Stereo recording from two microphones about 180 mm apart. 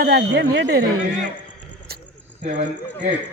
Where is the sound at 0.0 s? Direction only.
70° right (ahead or behind).